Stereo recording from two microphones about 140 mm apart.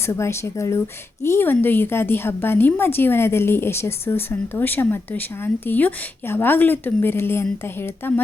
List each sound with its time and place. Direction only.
0.0 s a woman's voice: 20° left (ahead or behind)